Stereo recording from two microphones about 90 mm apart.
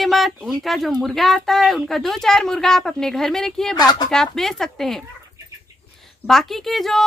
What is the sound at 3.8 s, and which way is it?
Speech, 50° left (ahead or behind).